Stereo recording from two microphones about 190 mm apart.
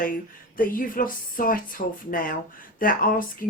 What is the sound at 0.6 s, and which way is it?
Speech, 45° left (ahead or behind).